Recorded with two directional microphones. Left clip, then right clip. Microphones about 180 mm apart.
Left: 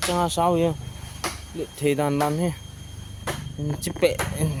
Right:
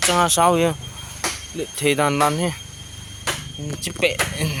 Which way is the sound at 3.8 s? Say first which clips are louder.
Right 2 dB; 35° left (ahead or behind).